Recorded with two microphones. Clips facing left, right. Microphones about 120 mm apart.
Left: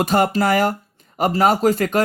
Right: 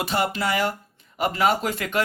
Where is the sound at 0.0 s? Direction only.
45° left (ahead or behind).